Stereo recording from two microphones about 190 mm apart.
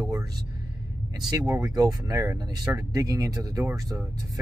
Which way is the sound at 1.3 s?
20° right (ahead or behind).